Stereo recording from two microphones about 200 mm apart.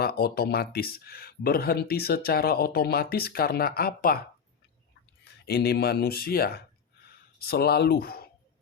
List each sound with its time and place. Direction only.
0.0 s speech: 50° left (ahead or behind)
5.2 s speech: 55° left (ahead or behind)